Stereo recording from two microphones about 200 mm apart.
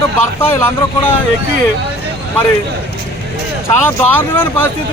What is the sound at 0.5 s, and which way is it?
Speech, 10° left (ahead or behind).